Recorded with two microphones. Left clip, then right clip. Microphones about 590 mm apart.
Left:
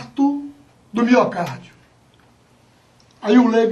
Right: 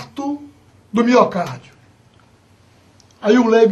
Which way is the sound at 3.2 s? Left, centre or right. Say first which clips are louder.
Right 2 dB; right.